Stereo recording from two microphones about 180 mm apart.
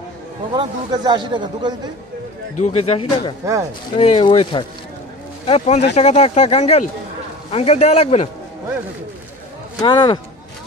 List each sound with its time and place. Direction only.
0.5 s a man's voice: 25° right (ahead or behind)
2.5 s speech: 40° left (ahead or behind)
5.5 s speech: 40° left (ahead or behind)
9.8 s speech: 25° left (ahead or behind)